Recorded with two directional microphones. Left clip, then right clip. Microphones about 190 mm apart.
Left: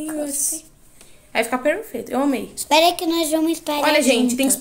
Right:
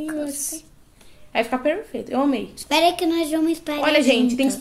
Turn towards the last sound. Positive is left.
turn(degrees=0)  # may be behind; listen again after turning